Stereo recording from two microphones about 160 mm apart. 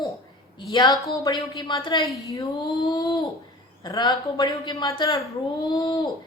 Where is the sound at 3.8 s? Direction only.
25° left (ahead or behind).